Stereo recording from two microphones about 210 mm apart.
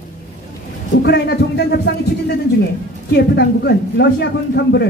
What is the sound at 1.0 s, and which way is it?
Speech, 50° left (ahead or behind).